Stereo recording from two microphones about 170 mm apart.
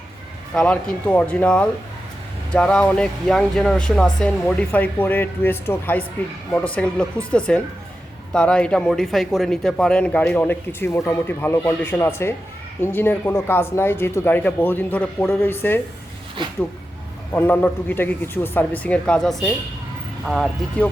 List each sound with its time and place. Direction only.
0.5 s speech: 5° left (ahead or behind)
17.3 s speech: 10° left (ahead or behind)